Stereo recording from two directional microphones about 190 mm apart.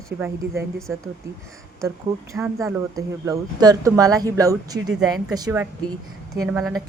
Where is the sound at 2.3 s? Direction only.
15° right (ahead or behind).